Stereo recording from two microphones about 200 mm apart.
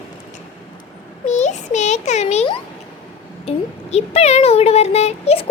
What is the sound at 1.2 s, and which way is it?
A child's voice, 35° left (ahead or behind).